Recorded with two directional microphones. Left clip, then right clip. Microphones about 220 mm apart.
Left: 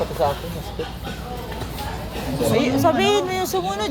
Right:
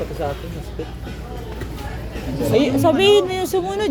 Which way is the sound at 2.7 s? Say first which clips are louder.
Right 5 dB; 50° right (ahead or behind).